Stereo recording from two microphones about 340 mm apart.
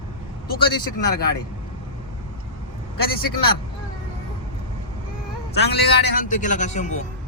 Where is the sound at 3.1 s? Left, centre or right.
Left.